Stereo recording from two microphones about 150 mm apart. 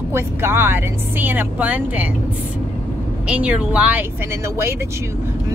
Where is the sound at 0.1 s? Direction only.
15° right (ahead or behind).